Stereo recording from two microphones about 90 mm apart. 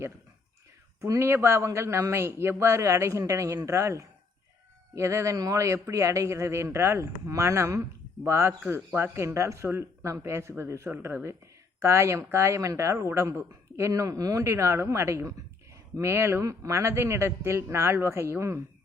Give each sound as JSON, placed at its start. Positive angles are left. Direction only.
{"t": 1.0, "sound": "a man's voice", "side_deg": -35}